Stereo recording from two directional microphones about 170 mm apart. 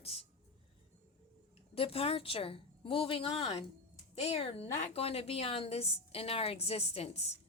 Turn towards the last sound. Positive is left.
turn(degrees=40)  # may be behind; listen again after turning